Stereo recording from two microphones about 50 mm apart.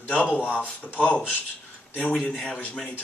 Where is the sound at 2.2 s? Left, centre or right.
Left.